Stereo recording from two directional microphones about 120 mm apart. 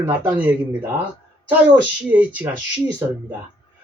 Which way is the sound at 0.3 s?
15° right (ahead or behind).